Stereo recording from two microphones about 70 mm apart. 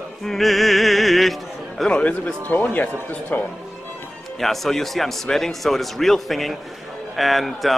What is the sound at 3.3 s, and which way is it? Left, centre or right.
Speech, left.